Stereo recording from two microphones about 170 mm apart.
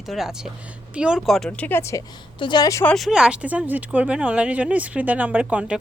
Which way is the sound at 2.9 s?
Centre (ahead or behind).